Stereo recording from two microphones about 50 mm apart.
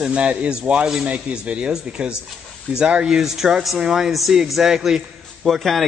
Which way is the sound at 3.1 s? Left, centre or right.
Centre.